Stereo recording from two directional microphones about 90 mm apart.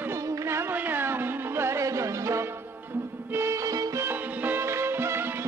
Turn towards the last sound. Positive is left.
turn(degrees=-25)  # may be behind; listen again after turning